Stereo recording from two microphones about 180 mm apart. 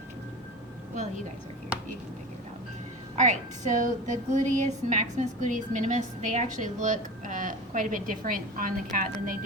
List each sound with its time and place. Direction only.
0.9 s a woman's voice: 40° right (ahead or behind)
3.2 s a woman's voice: 45° right (ahead or behind)